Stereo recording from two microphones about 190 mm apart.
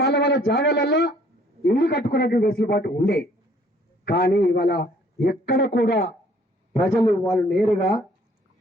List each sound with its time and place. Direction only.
0.1 s speech: 65° left (ahead or behind)
1.6 s a man's voice: 60° left (ahead or behind)
6.8 s speech: 5° left (ahead or behind)